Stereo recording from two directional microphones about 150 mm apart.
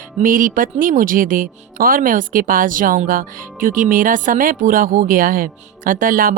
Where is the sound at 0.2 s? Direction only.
60° right (ahead or behind).